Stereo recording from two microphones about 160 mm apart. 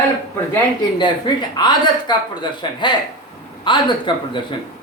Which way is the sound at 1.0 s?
30° left (ahead or behind).